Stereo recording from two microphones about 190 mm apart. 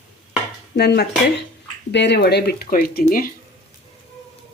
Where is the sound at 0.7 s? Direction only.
60° left (ahead or behind).